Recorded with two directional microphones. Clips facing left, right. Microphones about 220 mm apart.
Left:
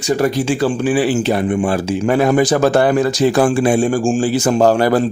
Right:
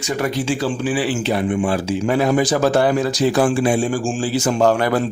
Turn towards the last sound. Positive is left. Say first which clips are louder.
# left 4 dB
turn(degrees=35)  # may be behind; listen again after turning